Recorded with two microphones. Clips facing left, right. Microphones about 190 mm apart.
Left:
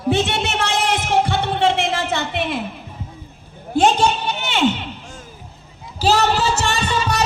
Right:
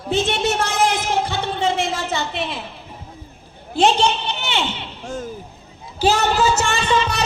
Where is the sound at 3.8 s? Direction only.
45° left (ahead or behind).